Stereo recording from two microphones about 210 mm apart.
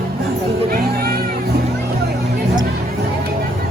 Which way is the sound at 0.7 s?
45° right (ahead or behind).